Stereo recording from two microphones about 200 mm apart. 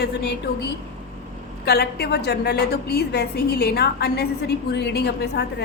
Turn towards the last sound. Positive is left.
turn(degrees=55)  # may be behind; listen again after turning